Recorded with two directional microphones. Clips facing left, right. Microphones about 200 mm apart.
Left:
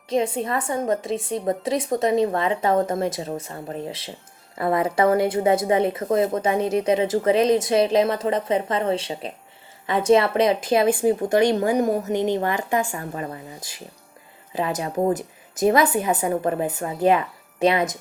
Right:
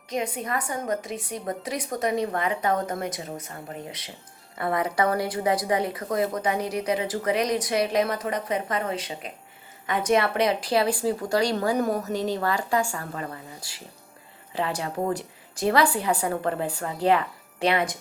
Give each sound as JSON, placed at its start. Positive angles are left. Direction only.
{"t": 0.1, "sound": "speech", "side_deg": 25}